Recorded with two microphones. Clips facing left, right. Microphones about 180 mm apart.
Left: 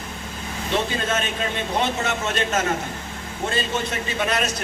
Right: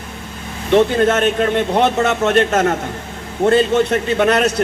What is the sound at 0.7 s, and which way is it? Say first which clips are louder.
A man's voice: right 11 dB; 60° right (ahead or behind).